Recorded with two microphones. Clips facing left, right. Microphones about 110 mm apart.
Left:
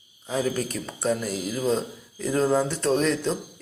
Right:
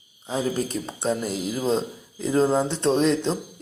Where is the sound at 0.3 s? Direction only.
20° right (ahead or behind).